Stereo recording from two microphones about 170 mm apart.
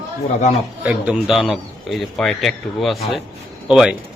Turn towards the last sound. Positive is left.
turn(degrees=-5)  # may be behind; listen again after turning